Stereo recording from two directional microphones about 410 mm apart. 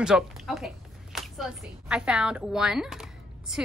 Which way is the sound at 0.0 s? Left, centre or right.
Centre.